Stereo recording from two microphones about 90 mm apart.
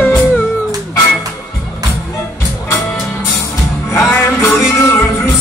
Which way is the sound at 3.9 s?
30° left (ahead or behind).